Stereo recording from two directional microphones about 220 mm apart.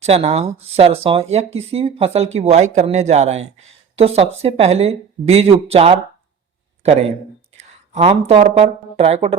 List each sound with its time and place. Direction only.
0.0 s speech: 30° right (ahead or behind)
7.5 s speech: 30° right (ahead or behind)